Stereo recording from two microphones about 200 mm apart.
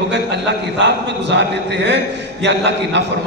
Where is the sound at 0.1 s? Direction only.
60° right (ahead or behind).